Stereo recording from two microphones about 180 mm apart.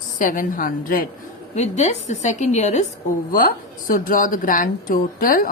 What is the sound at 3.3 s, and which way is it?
Speech, 50° left (ahead or behind).